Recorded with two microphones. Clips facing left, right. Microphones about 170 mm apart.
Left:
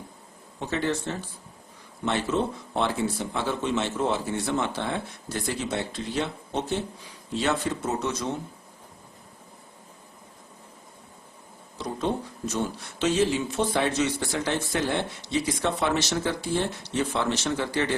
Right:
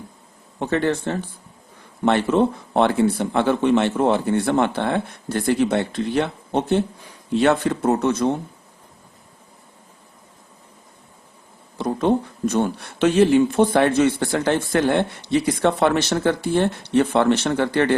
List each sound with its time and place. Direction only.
0.6 s a man's voice: 60° right (ahead or behind)
11.8 s a man's voice: 55° right (ahead or behind)